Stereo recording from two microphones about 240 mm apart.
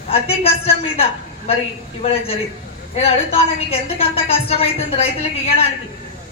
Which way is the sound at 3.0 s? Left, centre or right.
Left.